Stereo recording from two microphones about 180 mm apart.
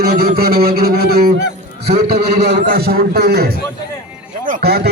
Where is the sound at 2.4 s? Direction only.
65° right (ahead or behind).